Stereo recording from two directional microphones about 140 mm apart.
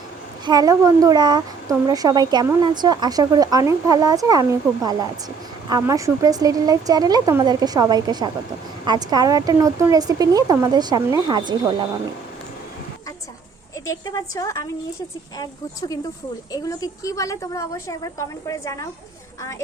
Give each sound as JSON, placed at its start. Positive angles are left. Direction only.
{"t": 0.4, "sound": "speech", "side_deg": -30}
{"t": 13.8, "sound": "a woman's voice", "side_deg": 25}